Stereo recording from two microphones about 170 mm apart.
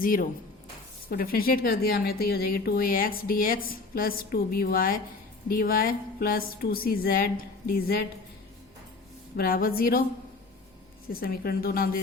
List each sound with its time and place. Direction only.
0.0 s speech: 55° left (ahead or behind)
9.3 s speech: 60° left (ahead or behind)
11.1 s speech: 60° left (ahead or behind)